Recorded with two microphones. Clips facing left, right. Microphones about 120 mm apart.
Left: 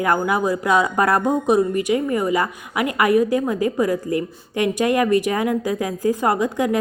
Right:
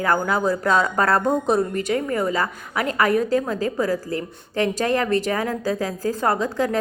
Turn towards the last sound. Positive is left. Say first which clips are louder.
# left 2 dB
turn(degrees=15)  # may be behind; listen again after turning